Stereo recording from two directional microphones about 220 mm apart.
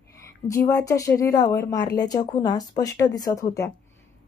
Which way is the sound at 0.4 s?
15° left (ahead or behind).